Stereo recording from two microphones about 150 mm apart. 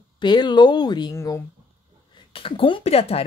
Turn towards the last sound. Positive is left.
turn(degrees=40)  # may be behind; listen again after turning